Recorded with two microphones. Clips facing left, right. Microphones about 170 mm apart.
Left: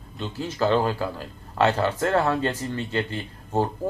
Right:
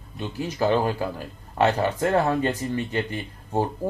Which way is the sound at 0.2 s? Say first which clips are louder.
Even; 15° right (ahead or behind).